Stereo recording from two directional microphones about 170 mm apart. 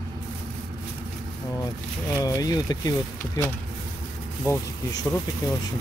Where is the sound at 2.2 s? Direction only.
20° left (ahead or behind).